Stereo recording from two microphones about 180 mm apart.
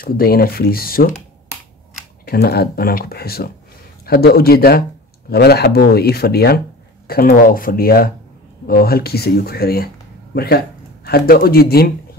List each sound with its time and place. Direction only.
0.0 s speech: 55° left (ahead or behind)
2.2 s speech: 60° left (ahead or behind)